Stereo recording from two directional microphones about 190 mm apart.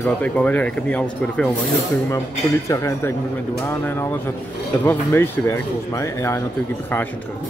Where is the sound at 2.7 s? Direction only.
15° left (ahead or behind).